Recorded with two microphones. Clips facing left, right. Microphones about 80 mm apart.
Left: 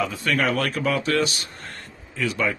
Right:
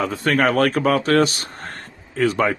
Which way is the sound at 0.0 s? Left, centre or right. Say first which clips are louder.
Right 5 dB; right.